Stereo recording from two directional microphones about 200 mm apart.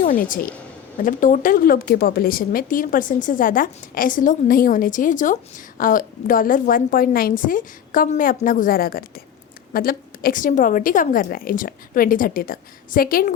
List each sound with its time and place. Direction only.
0.0 s a woman's voice: 45° left (ahead or behind)